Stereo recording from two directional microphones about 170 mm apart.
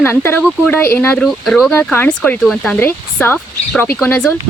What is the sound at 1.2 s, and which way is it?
Speech, centre (ahead or behind).